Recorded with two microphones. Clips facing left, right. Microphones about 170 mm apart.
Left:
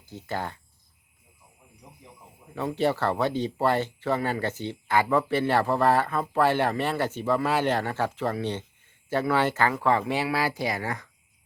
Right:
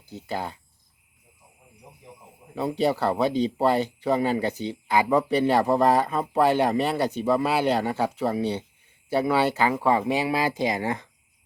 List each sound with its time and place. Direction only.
0.1 s speech: 15° right (ahead or behind)
2.6 s speech: 15° right (ahead or behind)